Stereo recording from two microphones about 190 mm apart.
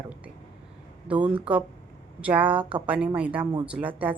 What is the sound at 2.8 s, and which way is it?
A woman's voice, 10° right (ahead or behind).